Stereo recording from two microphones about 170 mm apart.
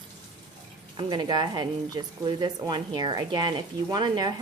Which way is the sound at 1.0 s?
25° right (ahead or behind).